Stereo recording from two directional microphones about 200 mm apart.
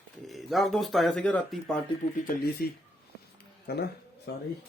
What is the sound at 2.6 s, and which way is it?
Speech, 50° left (ahead or behind).